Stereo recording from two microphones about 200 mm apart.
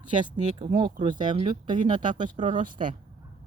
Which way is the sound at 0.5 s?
25° right (ahead or behind).